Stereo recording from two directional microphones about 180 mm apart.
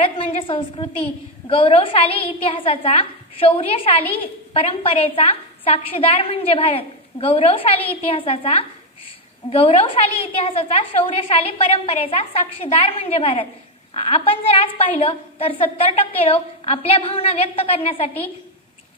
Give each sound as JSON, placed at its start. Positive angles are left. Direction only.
{"t": 0.0, "sound": "a woman's voice", "side_deg": 30}